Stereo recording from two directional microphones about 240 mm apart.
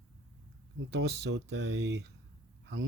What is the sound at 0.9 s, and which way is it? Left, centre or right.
Speech, right.